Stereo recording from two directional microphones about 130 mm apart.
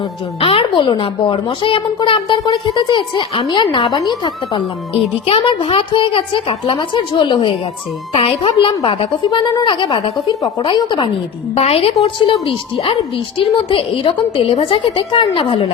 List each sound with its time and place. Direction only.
0.3 s a woman's voice: 45° left (ahead or behind)
11.5 s a woman's voice: 50° left (ahead or behind)